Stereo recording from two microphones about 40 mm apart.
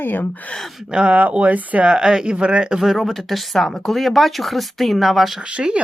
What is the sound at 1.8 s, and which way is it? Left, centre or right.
Speech, centre.